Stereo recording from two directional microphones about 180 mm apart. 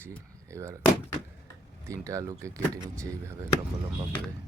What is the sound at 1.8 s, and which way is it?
Speech, 15° right (ahead or behind).